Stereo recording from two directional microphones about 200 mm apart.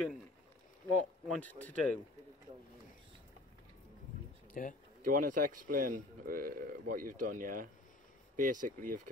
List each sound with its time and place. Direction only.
1.2 s speech: 5° left (ahead or behind)
4.6 s speech: 40° left (ahead or behind)
5.0 s a man's voice: 40° right (ahead or behind)